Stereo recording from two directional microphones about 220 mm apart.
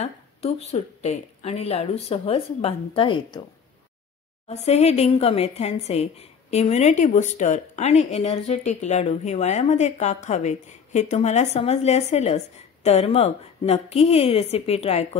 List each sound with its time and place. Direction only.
0.0 s a woman's voice: 30° left (ahead or behind)
4.5 s a woman's voice: 30° left (ahead or behind)